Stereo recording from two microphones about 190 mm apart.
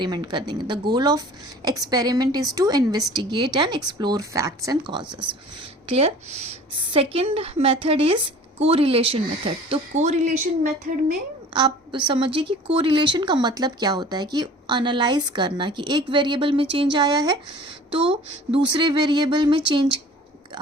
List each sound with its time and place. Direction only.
0.0 s a woman's voice: 20° right (ahead or behind); by 10.2 s 35° right (ahead or behind)
11.5 s a woman's voice: 25° right (ahead or behind)